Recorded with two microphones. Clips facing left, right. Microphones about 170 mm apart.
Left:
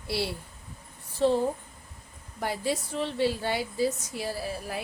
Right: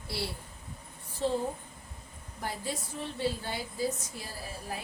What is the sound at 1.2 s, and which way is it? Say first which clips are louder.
Speech: left 6 dB; 75° left (ahead or behind).